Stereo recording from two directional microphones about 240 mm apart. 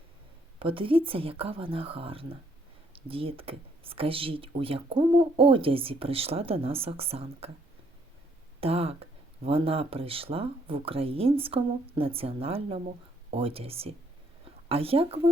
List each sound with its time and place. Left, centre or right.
0.6 s speech: right
8.6 s speech: right